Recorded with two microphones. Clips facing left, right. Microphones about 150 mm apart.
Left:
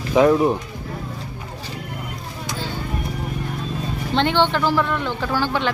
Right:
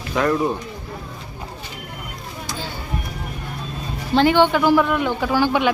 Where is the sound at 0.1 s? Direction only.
15° left (ahead or behind).